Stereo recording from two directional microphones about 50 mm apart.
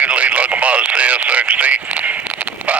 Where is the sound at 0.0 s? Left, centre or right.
Right.